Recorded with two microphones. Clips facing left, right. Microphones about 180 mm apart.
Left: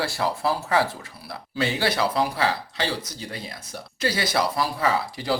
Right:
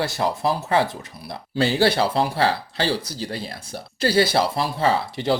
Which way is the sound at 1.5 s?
30° right (ahead or behind).